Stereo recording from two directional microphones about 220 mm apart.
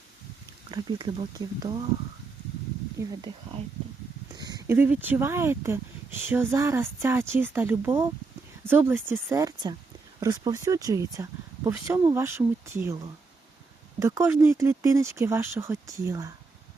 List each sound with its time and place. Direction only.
0.7 s speech: 20° right (ahead or behind)
4.4 s speech: 20° right (ahead or behind)
14.0 s speech: 10° right (ahead or behind)